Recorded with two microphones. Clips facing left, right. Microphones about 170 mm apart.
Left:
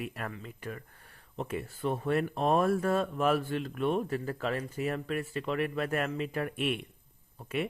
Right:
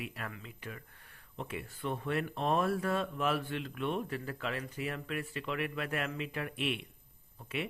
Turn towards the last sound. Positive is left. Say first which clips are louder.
# left 5 dB
turn(degrees=45)  # may be behind; listen again after turning